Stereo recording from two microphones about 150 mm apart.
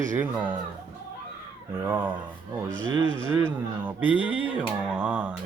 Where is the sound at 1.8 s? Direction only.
15° right (ahead or behind).